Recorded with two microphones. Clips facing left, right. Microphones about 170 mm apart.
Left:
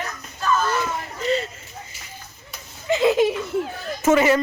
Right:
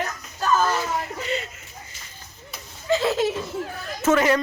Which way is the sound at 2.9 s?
15° left (ahead or behind).